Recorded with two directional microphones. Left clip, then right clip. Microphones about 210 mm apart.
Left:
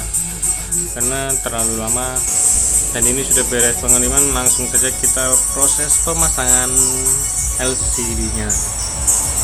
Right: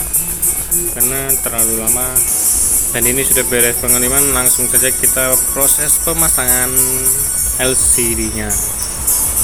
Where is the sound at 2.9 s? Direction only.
20° right (ahead or behind).